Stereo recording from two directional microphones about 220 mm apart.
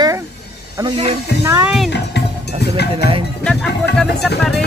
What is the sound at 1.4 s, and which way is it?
Speech, 10° right (ahead or behind).